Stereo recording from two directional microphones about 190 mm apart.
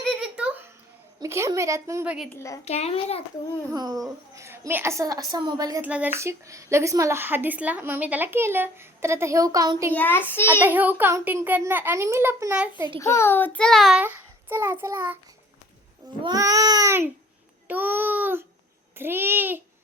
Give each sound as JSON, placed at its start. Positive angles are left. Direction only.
{"t": 0.0, "sound": "a sound", "side_deg": 0}
{"t": 1.2, "sound": "a woman's voice", "side_deg": -15}
{"t": 2.3, "sound": "a child's voice", "side_deg": 15}
{"t": 2.6, "sound": "a child's voice", "side_deg": 35}
{"t": 3.7, "sound": "a woman's voice", "side_deg": -20}
{"t": 9.9, "sound": "a child's voice", "side_deg": 10}
{"t": 10.6, "sound": "a woman's voice", "side_deg": -10}
{"t": 13.0, "sound": "a child's voice", "side_deg": 15}
{"t": 14.0, "sound": "a child's voice", "side_deg": -10}
{"t": 16.2, "sound": "a woman's voice", "side_deg": -20}
{"t": 17.7, "sound": "babbling", "side_deg": -10}
{"t": 18.9, "sound": "a woman's voice", "side_deg": -10}